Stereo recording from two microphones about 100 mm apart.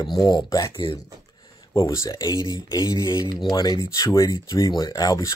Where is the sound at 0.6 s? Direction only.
60° left (ahead or behind).